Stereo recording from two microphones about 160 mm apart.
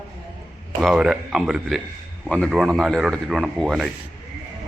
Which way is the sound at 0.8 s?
Centre (ahead or behind).